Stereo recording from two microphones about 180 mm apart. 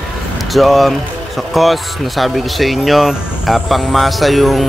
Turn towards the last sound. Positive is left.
turn(degrees=0)  # may be behind; listen again after turning